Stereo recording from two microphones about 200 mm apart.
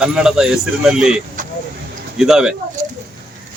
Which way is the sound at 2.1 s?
Centre (ahead or behind).